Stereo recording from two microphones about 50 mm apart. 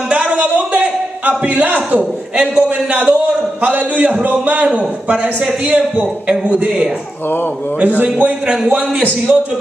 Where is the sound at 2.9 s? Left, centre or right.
Right.